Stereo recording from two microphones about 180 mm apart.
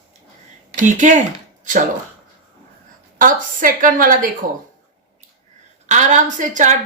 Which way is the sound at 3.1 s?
45° right (ahead or behind).